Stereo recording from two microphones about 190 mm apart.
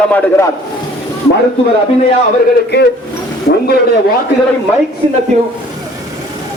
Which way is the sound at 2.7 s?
60° left (ahead or behind).